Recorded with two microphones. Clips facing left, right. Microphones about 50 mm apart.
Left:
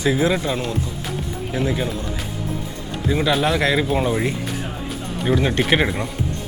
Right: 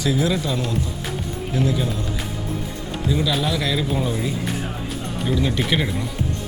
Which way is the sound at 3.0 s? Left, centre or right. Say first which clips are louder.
Left 3 dB; left.